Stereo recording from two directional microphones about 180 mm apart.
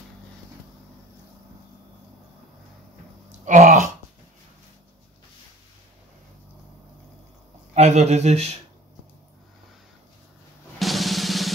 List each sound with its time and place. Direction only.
3.3 s burping: 45° right (ahead or behind)
7.7 s speech: 40° right (ahead or behind)
10.8 s drum: centre (ahead or behind)